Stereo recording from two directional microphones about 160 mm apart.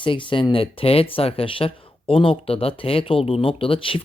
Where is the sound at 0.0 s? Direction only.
30° left (ahead or behind).